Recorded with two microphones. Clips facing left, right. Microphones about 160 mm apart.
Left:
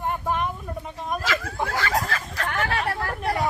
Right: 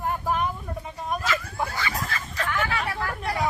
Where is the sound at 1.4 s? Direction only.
90° left.